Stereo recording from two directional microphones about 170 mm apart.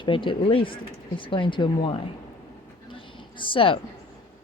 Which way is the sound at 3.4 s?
30° left (ahead or behind).